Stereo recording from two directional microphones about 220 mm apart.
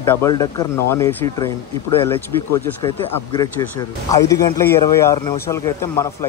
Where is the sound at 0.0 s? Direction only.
10° left (ahead or behind).